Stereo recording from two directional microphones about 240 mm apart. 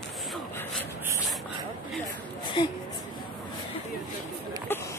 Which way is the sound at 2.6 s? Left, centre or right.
Centre.